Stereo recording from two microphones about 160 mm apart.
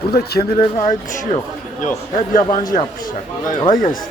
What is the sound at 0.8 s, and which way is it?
Speech, 45° left (ahead or behind).